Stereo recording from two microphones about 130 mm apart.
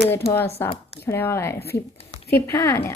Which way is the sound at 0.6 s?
20° left (ahead or behind).